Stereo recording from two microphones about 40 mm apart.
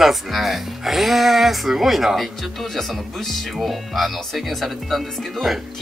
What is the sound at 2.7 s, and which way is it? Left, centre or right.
Speech, centre.